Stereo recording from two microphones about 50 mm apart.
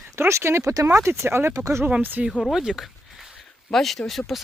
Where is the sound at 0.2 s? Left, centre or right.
Right.